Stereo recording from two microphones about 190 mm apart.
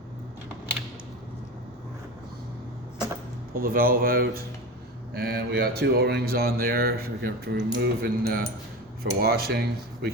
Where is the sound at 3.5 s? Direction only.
50° right (ahead or behind).